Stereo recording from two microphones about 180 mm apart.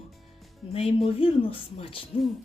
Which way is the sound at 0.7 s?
30° left (ahead or behind).